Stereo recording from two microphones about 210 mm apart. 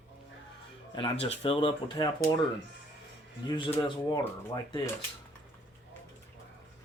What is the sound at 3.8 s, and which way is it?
Speech, 25° left (ahead or behind).